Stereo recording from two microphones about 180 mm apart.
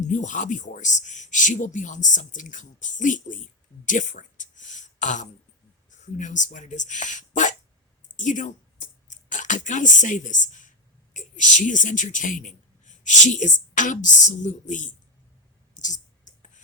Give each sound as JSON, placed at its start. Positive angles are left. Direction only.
{"t": 0.0, "sound": "speech", "side_deg": 40}
{"t": 15.8, "sound": "clicking", "side_deg": 45}